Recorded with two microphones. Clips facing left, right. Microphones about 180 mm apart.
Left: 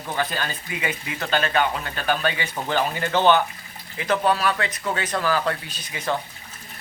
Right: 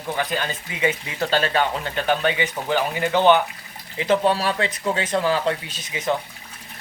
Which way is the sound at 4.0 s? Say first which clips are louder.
Right 2 dB; 25° right (ahead or behind).